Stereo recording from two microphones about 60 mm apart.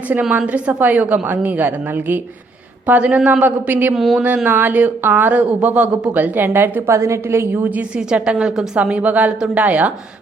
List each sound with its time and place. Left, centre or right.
0.1 s a woman's voice: right
2.8 s a woman's voice: right
3.4 s speech: right
3.9 s speech: centre
4.4 s speech: right
6.9 s a woman's voice: right
7.6 s a woman's voice: right